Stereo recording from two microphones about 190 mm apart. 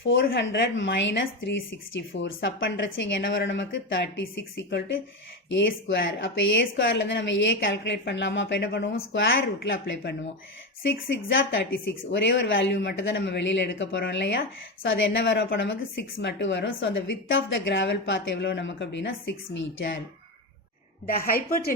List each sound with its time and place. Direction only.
0.1 s a woman's voice: 65° left (ahead or behind)
5.5 s a woman's voice: 75° left (ahead or behind)
11.3 s a woman's voice: 75° left (ahead or behind)
21.1 s a woman's voice: 50° left (ahead or behind)